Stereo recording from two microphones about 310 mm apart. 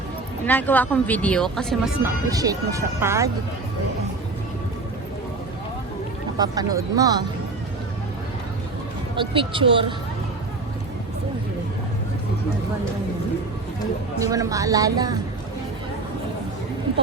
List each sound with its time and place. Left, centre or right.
0.4 s speech: centre
6.3 s speech: centre
9.1 s speech: centre
14.2 s speech: centre